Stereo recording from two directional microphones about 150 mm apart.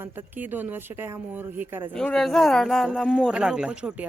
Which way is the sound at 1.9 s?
5° left (ahead or behind).